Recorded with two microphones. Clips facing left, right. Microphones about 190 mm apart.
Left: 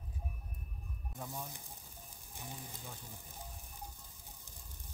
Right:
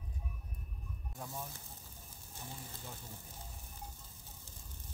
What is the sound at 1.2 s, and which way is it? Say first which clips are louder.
Speech: even; 15° left (ahead or behind).